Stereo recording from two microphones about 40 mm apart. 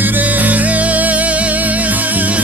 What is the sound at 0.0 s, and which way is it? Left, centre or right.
Music, right.